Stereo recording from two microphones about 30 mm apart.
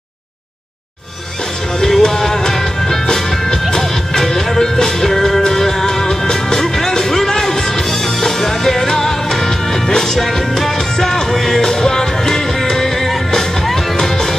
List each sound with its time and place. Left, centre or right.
1.8 s music: centre